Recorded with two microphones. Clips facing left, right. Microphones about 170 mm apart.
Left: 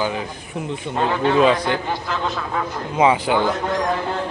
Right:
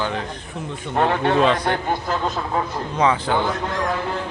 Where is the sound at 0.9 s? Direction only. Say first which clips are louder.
Even; 60° right (ahead or behind); by 2.6 s 40° right (ahead or behind).